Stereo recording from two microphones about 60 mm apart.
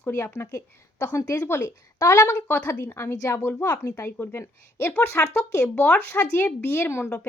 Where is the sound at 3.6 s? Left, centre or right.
Left.